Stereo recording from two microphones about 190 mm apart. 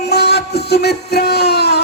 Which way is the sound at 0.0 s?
60° left (ahead or behind).